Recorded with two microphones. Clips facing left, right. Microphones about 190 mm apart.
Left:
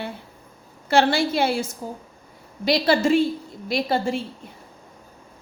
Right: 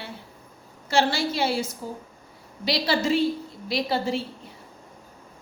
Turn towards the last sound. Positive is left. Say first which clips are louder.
# left 2 dB
turn(degrees=50)  # may be behind; listen again after turning